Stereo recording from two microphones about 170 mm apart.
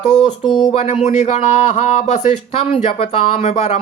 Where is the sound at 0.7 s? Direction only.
35° left (ahead or behind).